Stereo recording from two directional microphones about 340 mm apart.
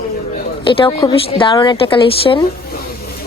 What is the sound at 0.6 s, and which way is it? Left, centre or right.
A woman's voice, centre.